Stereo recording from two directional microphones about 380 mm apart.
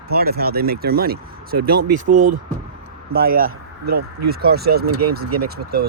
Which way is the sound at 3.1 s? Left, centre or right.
Right.